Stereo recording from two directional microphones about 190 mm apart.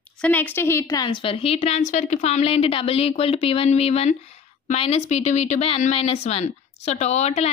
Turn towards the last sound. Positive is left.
turn(degrees=35)  # may be behind; listen again after turning